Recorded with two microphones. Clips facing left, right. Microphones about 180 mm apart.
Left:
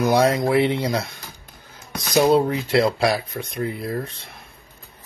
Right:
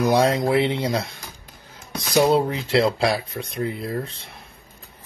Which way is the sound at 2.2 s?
25° right (ahead or behind).